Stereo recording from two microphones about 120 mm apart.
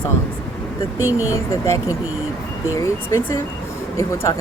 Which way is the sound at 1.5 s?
25° left (ahead or behind).